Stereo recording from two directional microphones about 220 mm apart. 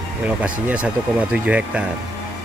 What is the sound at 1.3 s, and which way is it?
Speech, 5° right (ahead or behind).